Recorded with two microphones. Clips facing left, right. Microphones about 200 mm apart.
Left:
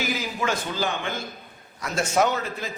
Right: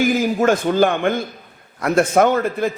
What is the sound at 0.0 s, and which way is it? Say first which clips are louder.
A man's voice: right 11 dB; 50° right (ahead or behind).